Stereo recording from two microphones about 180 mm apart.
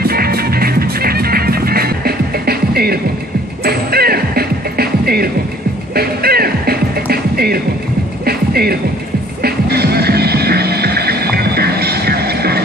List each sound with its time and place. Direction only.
0.0 s music: 60° right (ahead or behind)